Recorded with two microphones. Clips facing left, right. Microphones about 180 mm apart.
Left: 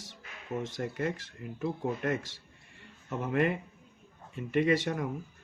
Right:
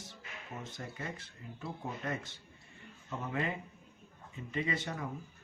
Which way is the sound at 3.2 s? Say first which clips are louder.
Left 8 dB; 65° left (ahead or behind).